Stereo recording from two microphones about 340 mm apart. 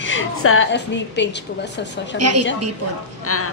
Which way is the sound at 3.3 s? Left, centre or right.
Left.